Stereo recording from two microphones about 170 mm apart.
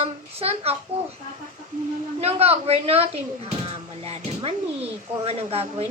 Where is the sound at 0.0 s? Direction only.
35° right (ahead or behind).